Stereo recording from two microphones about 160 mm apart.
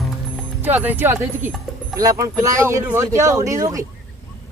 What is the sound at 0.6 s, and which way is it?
Speech, 10° right (ahead or behind).